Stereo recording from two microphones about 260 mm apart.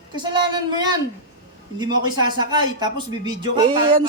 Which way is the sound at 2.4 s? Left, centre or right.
Centre.